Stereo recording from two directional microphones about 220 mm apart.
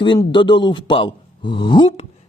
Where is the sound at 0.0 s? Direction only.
20° left (ahead or behind).